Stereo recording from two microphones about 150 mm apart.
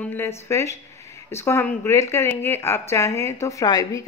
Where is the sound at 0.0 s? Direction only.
15° left (ahead or behind).